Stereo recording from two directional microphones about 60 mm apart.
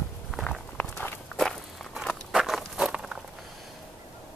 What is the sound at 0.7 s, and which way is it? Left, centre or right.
Walk, left.